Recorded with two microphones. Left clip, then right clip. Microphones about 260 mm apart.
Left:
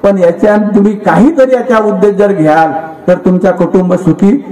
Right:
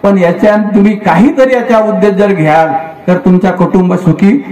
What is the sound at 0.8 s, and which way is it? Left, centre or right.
A man's voice, right.